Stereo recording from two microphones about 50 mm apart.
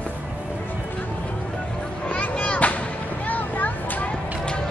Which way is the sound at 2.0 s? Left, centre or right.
Left.